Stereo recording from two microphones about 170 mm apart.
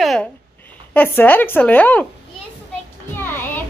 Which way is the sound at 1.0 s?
10° left (ahead or behind).